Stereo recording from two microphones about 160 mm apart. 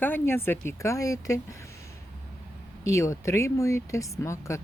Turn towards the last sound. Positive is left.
turn(degrees=20)  # may be behind; listen again after turning